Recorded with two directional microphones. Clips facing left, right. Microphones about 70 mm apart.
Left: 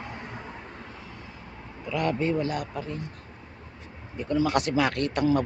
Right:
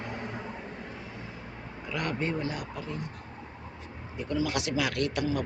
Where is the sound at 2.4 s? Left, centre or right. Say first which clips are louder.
Left 4 dB; left.